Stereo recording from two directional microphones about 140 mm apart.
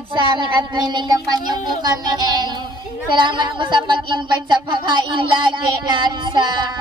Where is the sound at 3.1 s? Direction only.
35° right (ahead or behind).